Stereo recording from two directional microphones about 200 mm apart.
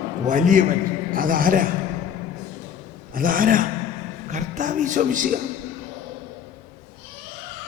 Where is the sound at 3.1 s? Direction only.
45° right (ahead or behind).